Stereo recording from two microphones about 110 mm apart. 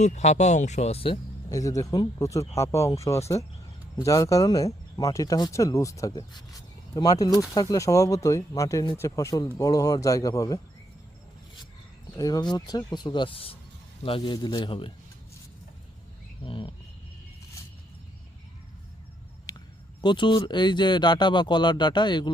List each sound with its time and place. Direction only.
0.0 s speech: 90° left; by 1.2 s 60° left (ahead or behind)
1.5 s speech: 30° left (ahead or behind)
12.1 s a man's voice: 35° left (ahead or behind); by 14.9 s 50° left (ahead or behind)
16.4 s speech: 55° left (ahead or behind)
19.5 s speech: 40° left (ahead or behind)